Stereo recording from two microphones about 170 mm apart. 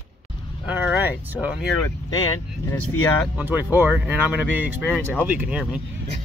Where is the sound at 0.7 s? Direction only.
10° right (ahead or behind).